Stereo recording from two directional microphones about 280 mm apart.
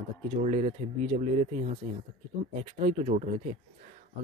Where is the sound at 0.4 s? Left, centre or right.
Right.